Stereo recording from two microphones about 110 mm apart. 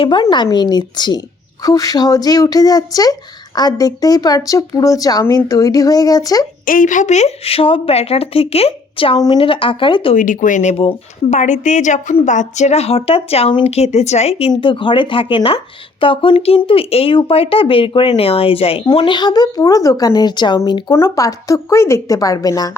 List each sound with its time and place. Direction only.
0.0 s a woman's voice: 45° left (ahead or behind)
7.0 s a woman's voice: 90° left; by 10.2 s 50° left (ahead or behind)
10.6 s a woman's voice: 75° left (ahead or behind)
14.5 s a woman's voice: 50° left (ahead or behind)
18.9 s a woman's voice: 45° left (ahead or behind)
20.9 s speech: 30° left (ahead or behind)